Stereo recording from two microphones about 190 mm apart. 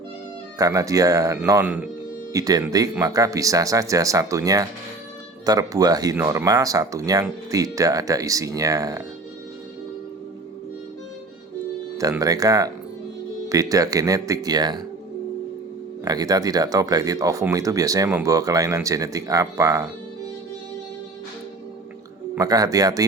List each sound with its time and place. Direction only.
0.6 s speech: 15° right (ahead or behind)
2.3 s speech: 20° right (ahead or behind)
11.9 s speech: 20° right (ahead or behind)
16.0 s speech: 20° right (ahead or behind)
22.4 s speech: 20° right (ahead or behind)